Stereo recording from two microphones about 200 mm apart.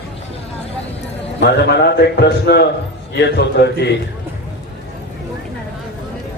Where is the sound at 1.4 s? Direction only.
55° left (ahead or behind).